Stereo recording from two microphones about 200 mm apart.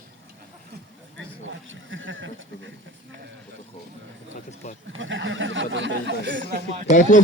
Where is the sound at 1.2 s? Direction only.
70° right (ahead or behind).